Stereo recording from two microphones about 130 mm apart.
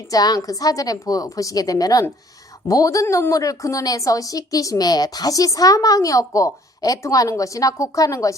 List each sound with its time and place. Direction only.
0.1 s a woman's voice: 30° left (ahead or behind)